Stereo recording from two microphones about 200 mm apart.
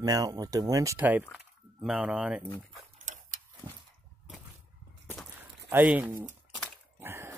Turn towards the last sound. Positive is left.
turn(degrees=-10)  # may be behind; listen again after turning